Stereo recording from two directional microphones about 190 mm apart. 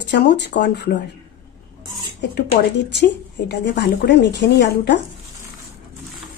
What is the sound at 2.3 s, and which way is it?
A woman's voice, 60° left (ahead or behind).